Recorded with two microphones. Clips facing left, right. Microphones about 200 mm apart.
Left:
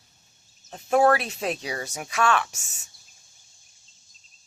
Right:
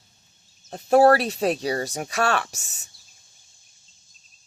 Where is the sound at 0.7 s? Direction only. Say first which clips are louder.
Right 4 dB; 35° right (ahead or behind).